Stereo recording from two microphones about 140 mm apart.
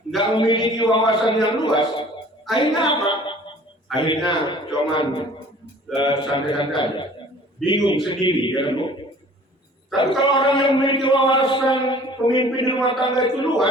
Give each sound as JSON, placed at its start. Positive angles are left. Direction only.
{"t": 0.2, "sound": "speech", "side_deg": 35}
{"t": 3.9, "sound": "a man's voice", "side_deg": 0}
{"t": 4.3, "sound": "speech", "side_deg": 35}
{"t": 10.2, "sound": "speech", "side_deg": 35}